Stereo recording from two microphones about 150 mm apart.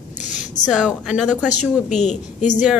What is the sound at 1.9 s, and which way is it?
Speech, 50° left (ahead or behind).